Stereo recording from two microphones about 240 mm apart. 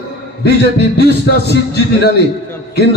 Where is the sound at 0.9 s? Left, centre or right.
Left.